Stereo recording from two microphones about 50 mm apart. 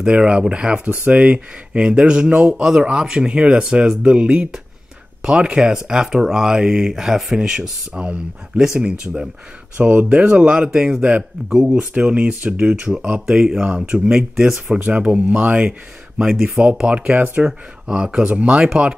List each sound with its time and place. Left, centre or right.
0.0 s speech: centre
5.2 s speech: centre
13.3 s speech: centre
15.0 s speech: right
16.2 s speech: centre